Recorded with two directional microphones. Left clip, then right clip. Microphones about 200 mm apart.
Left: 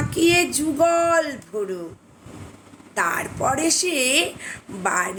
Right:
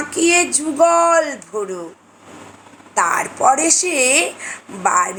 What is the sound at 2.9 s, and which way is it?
A woman's voice, 15° left (ahead or behind).